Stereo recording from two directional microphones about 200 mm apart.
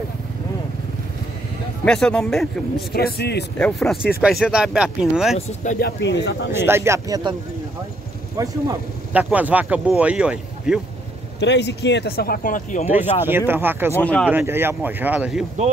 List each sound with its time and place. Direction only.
1.9 s speech: 5° left (ahead or behind)
2.9 s speech: 50° left (ahead or behind)
3.5 s speech: 5° left (ahead or behind)
5.6 s speech: 45° left (ahead or behind); by 6.5 s 60° left (ahead or behind)
6.5 s speech: 10° right (ahead or behind)
8.4 s speech: 15° right (ahead or behind)
9.1 s speech: 5° right (ahead or behind)
11.3 s speech: 60° left (ahead or behind); by 12.9 s 40° left (ahead or behind)
12.9 s speech: 10° right (ahead or behind)